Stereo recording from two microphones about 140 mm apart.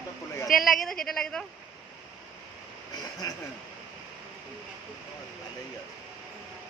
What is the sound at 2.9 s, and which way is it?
Speech, 25° left (ahead or behind).